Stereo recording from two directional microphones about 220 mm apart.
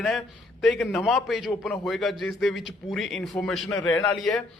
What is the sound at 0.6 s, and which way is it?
A man's voice, centre (ahead or behind).